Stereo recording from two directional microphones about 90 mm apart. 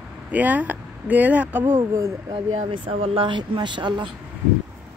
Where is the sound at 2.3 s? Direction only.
80° right; by 4.1 s 60° right (ahead or behind).